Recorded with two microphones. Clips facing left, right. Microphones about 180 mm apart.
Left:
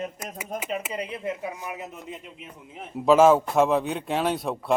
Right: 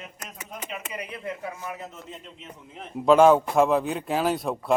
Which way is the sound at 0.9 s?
25° left (ahead or behind).